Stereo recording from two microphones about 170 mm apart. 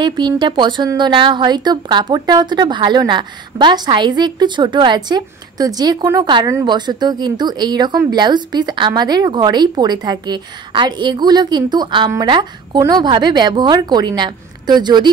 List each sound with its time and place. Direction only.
0.0 s a woman's voice: 25° right (ahead or behind)